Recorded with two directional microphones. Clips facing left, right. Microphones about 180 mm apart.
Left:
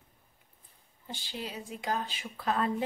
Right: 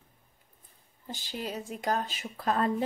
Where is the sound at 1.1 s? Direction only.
45° right (ahead or behind).